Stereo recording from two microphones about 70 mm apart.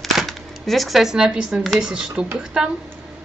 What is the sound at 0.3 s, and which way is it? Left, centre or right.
Speech, centre.